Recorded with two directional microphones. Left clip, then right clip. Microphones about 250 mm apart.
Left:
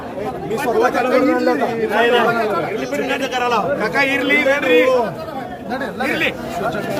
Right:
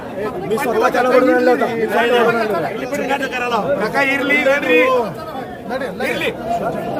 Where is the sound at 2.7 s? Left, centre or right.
Left.